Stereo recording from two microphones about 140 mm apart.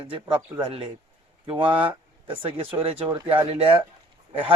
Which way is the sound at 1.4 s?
40° right (ahead or behind).